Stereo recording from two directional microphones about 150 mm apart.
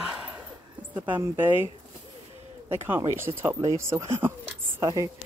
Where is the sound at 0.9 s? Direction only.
10° right (ahead or behind).